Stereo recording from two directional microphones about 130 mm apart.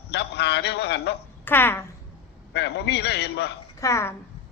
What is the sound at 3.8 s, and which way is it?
Speech, 20° left (ahead or behind).